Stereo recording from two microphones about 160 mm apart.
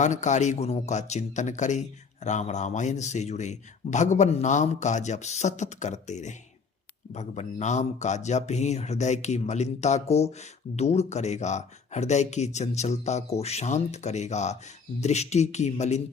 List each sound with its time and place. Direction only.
0.0 s speech: 50° left (ahead or behind)